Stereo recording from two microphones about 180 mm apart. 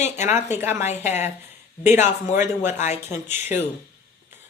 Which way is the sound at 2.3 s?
10° right (ahead or behind).